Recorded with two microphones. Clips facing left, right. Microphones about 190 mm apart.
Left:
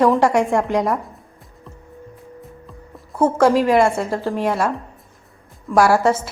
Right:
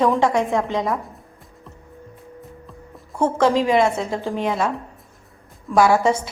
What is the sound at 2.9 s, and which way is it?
A woman's voice, 10° left (ahead or behind).